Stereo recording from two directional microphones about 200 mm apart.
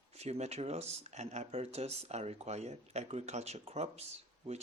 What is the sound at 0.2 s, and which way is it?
Speech, 35° right (ahead or behind).